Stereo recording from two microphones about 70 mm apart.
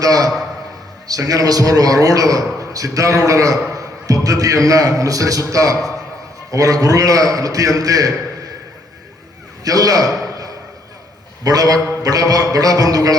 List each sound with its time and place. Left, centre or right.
0.0 s a man's voice: right
9.6 s a man's voice: right
11.4 s a man's voice: right